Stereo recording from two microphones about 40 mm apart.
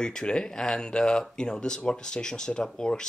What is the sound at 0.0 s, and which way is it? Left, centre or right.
Speech, left.